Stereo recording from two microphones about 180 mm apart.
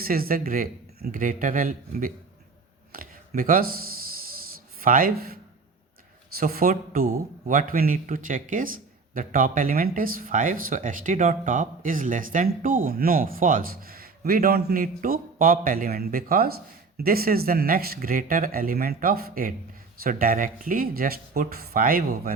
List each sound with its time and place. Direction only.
0.0 s a man's voice: 55° right (ahead or behind)